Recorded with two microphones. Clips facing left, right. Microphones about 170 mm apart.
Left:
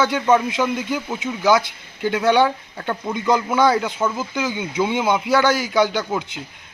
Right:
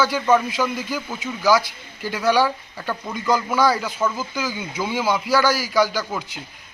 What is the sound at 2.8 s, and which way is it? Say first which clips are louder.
A man's voice: left 2 dB; 20° left (ahead or behind).